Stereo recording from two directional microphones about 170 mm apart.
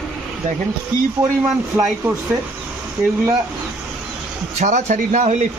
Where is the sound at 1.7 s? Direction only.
5° right (ahead or behind).